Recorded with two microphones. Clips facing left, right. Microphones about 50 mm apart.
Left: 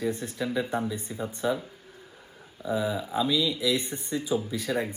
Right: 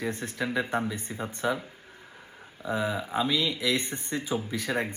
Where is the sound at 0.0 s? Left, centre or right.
Right.